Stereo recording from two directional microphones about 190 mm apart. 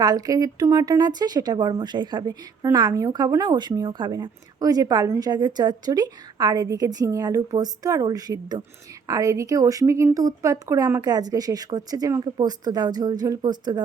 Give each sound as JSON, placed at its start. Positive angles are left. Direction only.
{"t": 0.0, "sound": "speech", "side_deg": -20}